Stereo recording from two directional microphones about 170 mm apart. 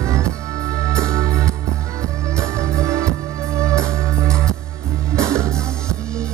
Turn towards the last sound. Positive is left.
turn(degrees=-15)  # may be behind; listen again after turning